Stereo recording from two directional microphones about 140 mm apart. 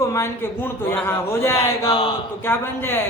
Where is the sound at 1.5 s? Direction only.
40° left (ahead or behind).